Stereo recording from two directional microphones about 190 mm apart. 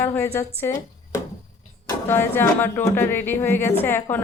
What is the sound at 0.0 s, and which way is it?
A woman's voice, 10° left (ahead or behind).